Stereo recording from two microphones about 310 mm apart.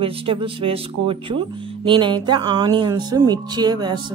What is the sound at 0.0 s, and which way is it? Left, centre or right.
Speech, centre.